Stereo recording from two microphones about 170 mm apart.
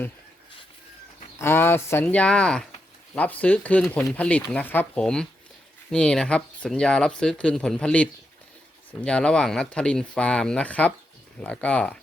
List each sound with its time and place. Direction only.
1.4 s speech: 15° left (ahead or behind)